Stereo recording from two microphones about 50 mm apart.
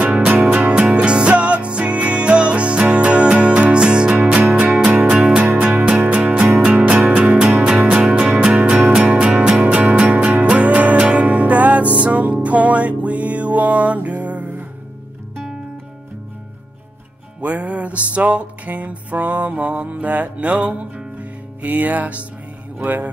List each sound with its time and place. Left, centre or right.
0.0 s music: centre
17.4 s music: right
22.8 s speech: right